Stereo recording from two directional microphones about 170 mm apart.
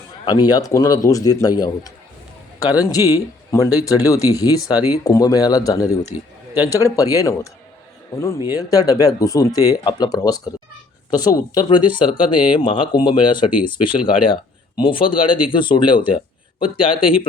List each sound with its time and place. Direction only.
0.3 s a man's voice: 25° left (ahead or behind)